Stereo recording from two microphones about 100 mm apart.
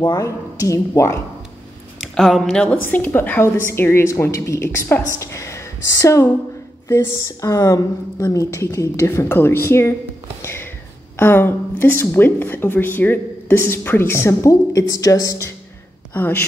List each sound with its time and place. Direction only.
0.2 s a woman's voice: 30° left (ahead or behind)
2.1 s speech: centre (ahead or behind)
2.6 s speech: 15° left (ahead or behind)
10.4 s music: 25° left (ahead or behind)
11.1 s speech: 20° left (ahead or behind)
16.1 s speech: 20° left (ahead or behind)